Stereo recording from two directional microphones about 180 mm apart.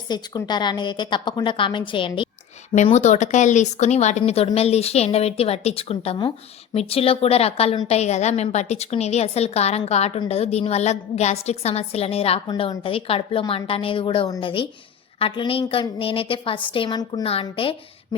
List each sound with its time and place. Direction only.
0.1 s a woman's voice: 25° left (ahead or behind)
2.7 s a woman's voice: 40° left (ahead or behind)